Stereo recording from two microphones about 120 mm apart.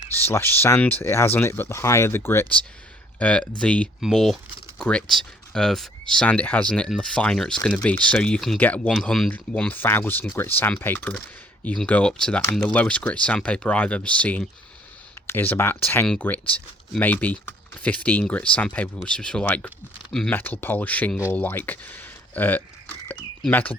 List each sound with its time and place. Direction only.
0.2 s speech: 20° left (ahead or behind)
8.9 s speech: centre (ahead or behind)
21.3 s a sound: 15° left (ahead or behind)
23.5 s speech: 15° left (ahead or behind)